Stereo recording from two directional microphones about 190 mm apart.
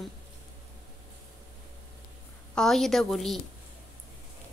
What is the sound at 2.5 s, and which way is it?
Speech, centre (ahead or behind).